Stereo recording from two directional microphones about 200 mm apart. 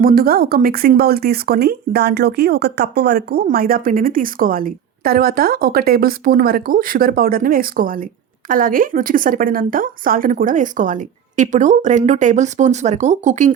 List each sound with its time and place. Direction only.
0.0 s a woman's voice: 45° right (ahead or behind)